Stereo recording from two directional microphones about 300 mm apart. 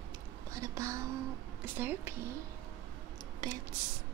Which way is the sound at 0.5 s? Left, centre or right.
Centre.